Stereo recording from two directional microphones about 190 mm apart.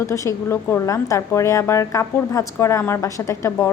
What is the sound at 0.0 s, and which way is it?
Speech, 15° left (ahead or behind).